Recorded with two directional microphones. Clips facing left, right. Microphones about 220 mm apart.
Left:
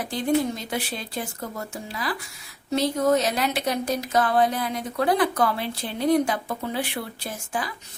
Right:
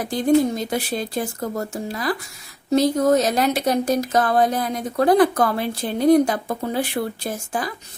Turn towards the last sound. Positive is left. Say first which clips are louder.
# right 5 dB
turn(degrees=-45)  # may be behind; listen again after turning